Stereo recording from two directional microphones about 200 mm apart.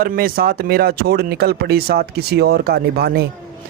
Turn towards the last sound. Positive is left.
turn(degrees=-50)  # may be behind; listen again after turning